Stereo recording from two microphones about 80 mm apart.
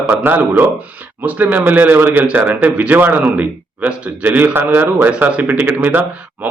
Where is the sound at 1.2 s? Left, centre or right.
Right.